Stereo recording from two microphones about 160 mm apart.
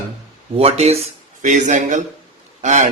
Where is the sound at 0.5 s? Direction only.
40° right (ahead or behind).